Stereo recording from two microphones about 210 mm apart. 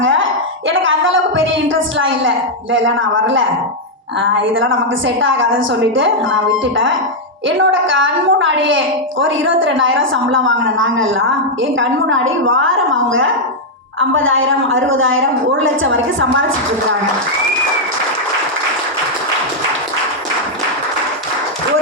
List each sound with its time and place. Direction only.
0.0 s music: 65° right (ahead or behind)
0.7 s a woman's voice: 70° right (ahead or behind)
4.5 s a woman's voice: 65° right (ahead or behind)